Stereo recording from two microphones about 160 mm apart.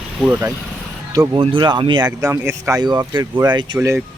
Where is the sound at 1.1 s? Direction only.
30° right (ahead or behind).